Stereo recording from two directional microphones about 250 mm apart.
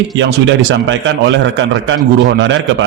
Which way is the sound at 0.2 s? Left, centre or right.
Right.